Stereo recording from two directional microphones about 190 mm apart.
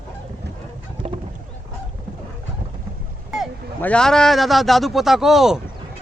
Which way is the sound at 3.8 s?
5° left (ahead or behind).